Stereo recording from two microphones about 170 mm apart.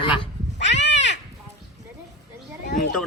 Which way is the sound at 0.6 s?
90° left.